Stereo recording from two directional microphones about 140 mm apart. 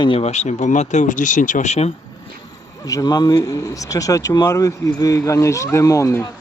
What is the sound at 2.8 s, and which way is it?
Speech, 25° left (ahead or behind).